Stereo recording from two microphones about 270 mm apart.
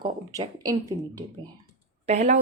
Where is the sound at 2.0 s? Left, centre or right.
Right.